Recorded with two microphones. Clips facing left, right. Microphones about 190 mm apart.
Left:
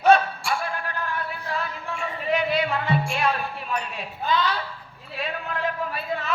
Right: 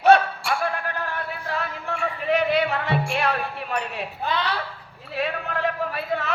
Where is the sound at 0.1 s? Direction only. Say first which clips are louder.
Right 1 dB; 60° right (ahead or behind).